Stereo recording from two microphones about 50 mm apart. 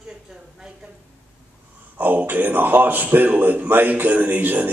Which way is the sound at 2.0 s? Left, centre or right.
Right.